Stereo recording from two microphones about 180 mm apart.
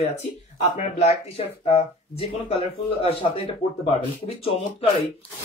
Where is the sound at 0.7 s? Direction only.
35° left (ahead or behind).